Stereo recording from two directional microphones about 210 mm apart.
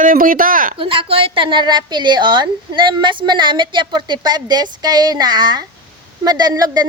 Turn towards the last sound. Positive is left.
turn(degrees=-20)  # may be behind; listen again after turning